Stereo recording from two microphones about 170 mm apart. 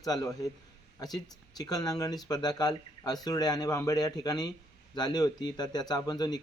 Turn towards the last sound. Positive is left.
turn(degrees=25)  # may be behind; listen again after turning